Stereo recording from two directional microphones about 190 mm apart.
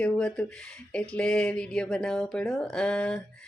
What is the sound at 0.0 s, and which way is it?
Speech, 5° left (ahead or behind).